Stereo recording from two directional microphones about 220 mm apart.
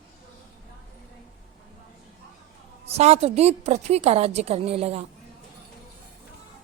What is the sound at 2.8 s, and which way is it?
A woman's voice, 30° right (ahead or behind).